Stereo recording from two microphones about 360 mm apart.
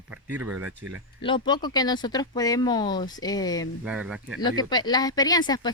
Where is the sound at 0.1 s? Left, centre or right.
Centre.